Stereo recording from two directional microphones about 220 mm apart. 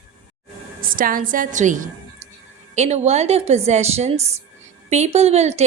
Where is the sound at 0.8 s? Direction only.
40° right (ahead or behind).